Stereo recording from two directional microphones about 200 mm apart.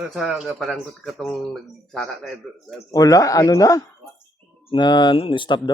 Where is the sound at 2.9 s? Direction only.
15° left (ahead or behind).